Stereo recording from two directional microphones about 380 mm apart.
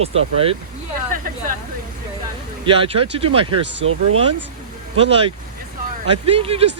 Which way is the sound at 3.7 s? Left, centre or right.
Right.